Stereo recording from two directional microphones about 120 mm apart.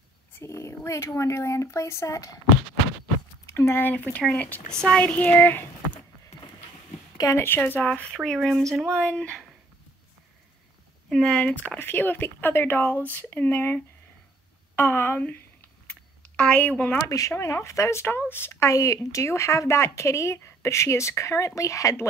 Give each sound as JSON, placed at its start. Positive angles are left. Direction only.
{"t": 0.3, "sound": "speech", "side_deg": 20}
{"t": 3.4, "sound": "speech", "side_deg": 20}
{"t": 7.2, "sound": "speech", "side_deg": 25}
{"t": 11.1, "sound": "speech", "side_deg": 5}
{"t": 14.8, "sound": "a sound", "side_deg": 20}
{"t": 17.0, "sound": "speech", "side_deg": 30}